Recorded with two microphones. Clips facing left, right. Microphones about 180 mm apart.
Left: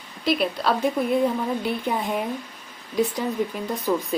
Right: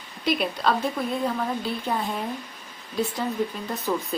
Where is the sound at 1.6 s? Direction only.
15° left (ahead or behind).